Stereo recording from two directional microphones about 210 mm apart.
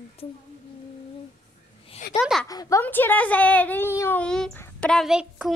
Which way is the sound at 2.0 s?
40° left (ahead or behind).